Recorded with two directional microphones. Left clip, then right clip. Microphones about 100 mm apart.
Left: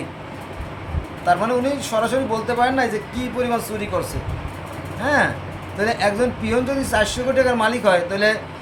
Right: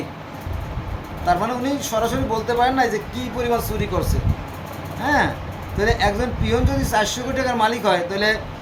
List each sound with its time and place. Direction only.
1.2 s speech: 15° left (ahead or behind)
5.0 s speech: 15° left (ahead or behind)